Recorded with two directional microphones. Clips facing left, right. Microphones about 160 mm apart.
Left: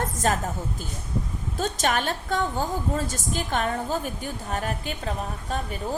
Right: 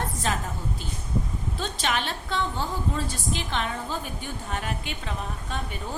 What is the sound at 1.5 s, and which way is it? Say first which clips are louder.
A woman's voice: left 4 dB; 45° left (ahead or behind).